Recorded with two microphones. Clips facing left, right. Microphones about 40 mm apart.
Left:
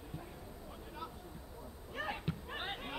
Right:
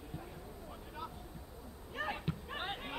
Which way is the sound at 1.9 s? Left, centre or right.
Centre.